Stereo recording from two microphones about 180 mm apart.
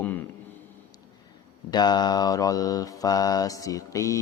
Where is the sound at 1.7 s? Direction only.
25° left (ahead or behind).